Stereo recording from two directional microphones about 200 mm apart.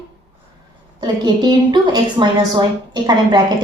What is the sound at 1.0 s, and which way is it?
A woman's voice, 20° right (ahead or behind).